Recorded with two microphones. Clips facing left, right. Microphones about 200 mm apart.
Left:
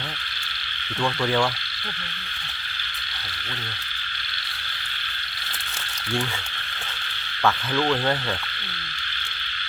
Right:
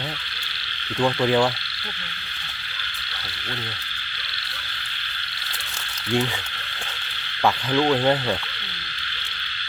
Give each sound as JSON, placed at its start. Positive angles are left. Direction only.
{"t": 0.9, "sound": "speech", "side_deg": -15}
{"t": 7.4, "sound": "speech", "side_deg": -15}